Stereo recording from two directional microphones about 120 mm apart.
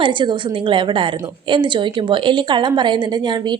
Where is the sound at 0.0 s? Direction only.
40° right (ahead or behind).